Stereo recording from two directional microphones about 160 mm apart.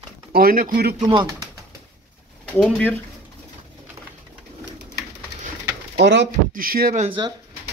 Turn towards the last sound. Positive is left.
turn(degrees=-30)  # may be behind; listen again after turning